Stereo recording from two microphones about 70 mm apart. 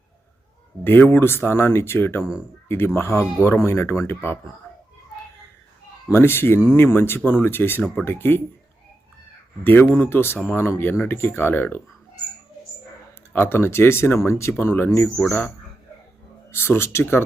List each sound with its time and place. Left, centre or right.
0.9 s speech: left
6.1 s speech: left
9.6 s speech: left
13.3 s speech: left
16.5 s speech: left